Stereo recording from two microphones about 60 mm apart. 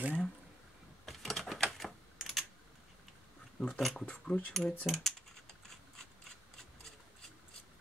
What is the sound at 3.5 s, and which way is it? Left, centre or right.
Speech, centre.